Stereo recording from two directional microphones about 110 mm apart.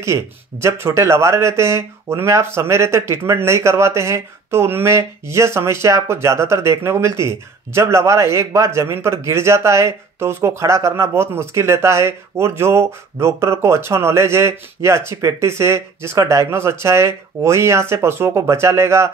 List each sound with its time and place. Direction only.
0.0 s speech: 25° right (ahead or behind)